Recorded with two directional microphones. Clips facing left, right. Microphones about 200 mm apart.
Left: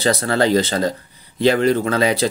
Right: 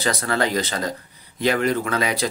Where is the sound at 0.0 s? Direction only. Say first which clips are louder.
Left 5 dB; 30° left (ahead or behind).